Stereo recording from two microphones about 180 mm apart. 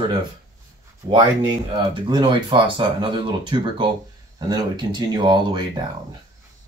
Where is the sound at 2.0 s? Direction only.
25° right (ahead or behind).